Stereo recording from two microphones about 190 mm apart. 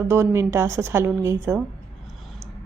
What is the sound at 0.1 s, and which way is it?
A woman's voice, 15° right (ahead or behind).